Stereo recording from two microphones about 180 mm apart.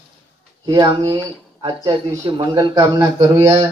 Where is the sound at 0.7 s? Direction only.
20° right (ahead or behind).